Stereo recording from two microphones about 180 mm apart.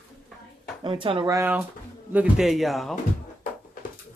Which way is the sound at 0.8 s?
30° right (ahead or behind).